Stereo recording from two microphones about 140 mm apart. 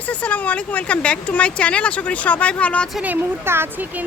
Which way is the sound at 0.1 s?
10° left (ahead or behind).